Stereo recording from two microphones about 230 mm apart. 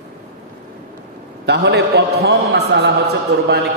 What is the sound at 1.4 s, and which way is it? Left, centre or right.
A man's voice, right.